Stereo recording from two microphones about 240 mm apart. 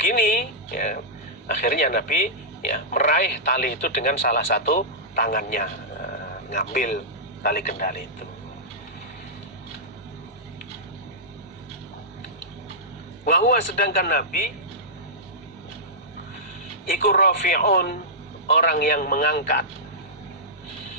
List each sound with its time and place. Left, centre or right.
0.0 s a sound: left
1.5 s a man's voice: left
13.2 s a man's voice: left
17.0 s a man's voice: left